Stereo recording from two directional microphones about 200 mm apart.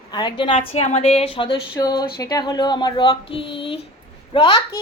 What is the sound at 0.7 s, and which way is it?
Speech, 30° left (ahead or behind).